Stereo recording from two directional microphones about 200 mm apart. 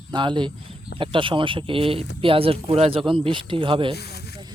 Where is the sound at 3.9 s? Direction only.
55° left (ahead or behind).